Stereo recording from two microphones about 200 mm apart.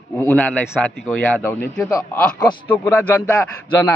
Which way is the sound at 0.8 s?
Centre (ahead or behind).